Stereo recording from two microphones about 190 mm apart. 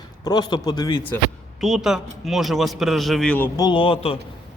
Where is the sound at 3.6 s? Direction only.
25° left (ahead or behind).